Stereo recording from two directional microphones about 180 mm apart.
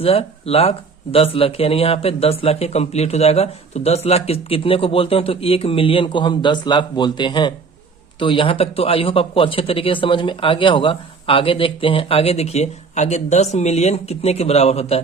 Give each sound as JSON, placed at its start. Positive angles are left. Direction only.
{"t": 0.0, "sound": "speech", "side_deg": 35}